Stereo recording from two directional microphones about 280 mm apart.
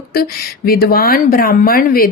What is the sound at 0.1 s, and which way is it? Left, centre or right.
Speech, left.